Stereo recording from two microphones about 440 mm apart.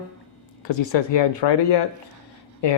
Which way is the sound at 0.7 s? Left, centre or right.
Left.